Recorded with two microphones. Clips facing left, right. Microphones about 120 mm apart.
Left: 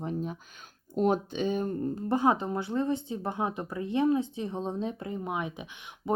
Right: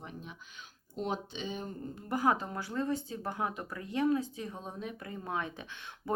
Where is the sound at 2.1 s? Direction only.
25° left (ahead or behind).